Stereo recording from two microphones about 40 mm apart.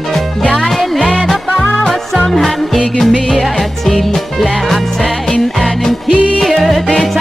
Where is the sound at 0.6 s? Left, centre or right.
Centre.